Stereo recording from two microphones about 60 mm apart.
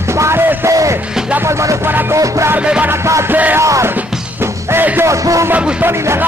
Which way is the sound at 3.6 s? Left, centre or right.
Right.